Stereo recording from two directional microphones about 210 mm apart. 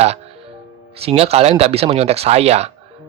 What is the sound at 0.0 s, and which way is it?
Music, 30° right (ahead or behind).